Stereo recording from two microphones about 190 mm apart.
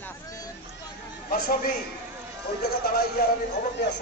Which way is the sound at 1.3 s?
50° left (ahead or behind).